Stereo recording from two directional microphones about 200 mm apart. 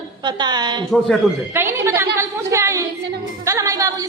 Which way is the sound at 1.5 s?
10° right (ahead or behind).